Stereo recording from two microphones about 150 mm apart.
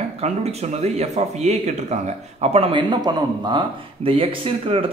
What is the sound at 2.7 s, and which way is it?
Speech, 30° right (ahead or behind).